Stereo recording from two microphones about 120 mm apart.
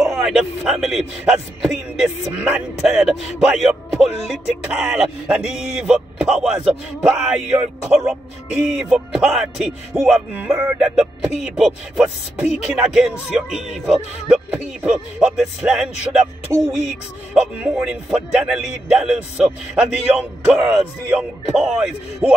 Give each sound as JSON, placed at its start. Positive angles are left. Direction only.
{"t": 0.0, "sound": "a man's voice", "side_deg": 0}
{"t": 16.5, "sound": "a sound", "side_deg": -30}
{"t": 17.3, "sound": "a man's voice", "side_deg": -5}
{"t": 22.2, "sound": "speech", "side_deg": -15}